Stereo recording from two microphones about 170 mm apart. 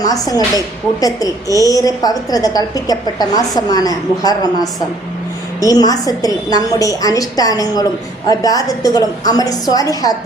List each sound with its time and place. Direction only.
0.0 s a woman's voice: 20° left (ahead or behind)